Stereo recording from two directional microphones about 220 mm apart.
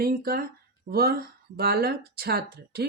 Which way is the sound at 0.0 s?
45° right (ahead or behind).